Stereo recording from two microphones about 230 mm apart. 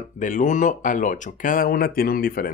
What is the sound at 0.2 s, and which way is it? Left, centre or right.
Speech, left.